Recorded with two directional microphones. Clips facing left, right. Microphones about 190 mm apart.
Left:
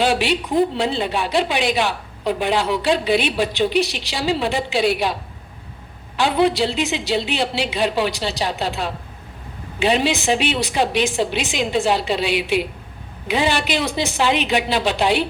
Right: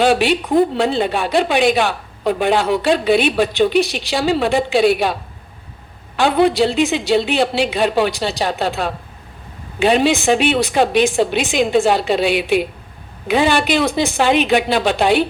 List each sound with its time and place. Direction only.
0.0 s a woman's voice: 50° right (ahead or behind)
6.1 s a woman's voice: 50° right (ahead or behind)